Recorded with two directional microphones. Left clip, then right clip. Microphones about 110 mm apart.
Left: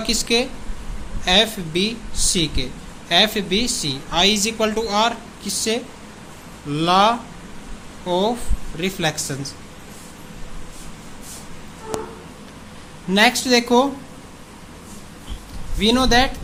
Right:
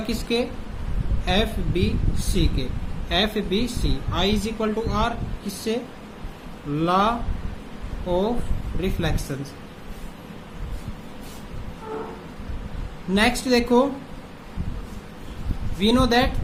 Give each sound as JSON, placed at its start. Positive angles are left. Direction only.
{"t": 0.1, "sound": "speech", "side_deg": 35}
{"t": 13.1, "sound": "speech", "side_deg": 35}
{"t": 15.8, "sound": "speech", "side_deg": 30}